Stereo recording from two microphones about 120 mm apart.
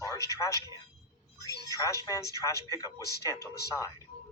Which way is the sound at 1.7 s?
25° left (ahead or behind).